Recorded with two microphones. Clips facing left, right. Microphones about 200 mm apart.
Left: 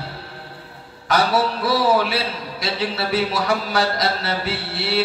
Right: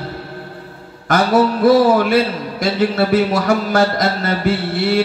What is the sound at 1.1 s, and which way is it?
A man's voice, 50° right (ahead or behind).